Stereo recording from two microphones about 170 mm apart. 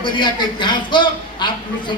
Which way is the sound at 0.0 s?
25° left (ahead or behind).